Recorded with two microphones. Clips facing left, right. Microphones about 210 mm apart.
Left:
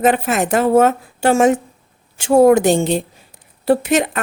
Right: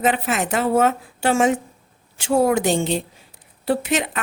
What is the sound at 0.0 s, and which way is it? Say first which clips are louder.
Speech: left 5 dB; 45° left (ahead or behind).